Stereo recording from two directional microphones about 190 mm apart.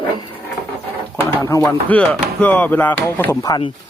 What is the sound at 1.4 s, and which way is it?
Speech, 15° left (ahead or behind).